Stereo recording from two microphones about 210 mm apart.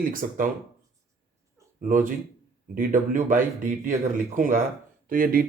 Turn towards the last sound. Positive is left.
turn(degrees=-45)  # may be behind; listen again after turning